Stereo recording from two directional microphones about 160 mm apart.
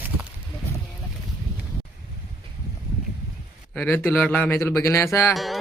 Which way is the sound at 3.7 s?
10° left (ahead or behind).